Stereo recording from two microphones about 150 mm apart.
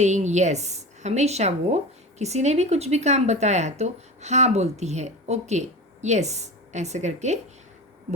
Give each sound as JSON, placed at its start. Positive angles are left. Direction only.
{"t": 0.0, "sound": "speech", "side_deg": -50}